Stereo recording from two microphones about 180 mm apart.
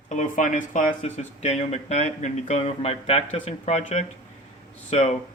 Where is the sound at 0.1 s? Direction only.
45° left (ahead or behind).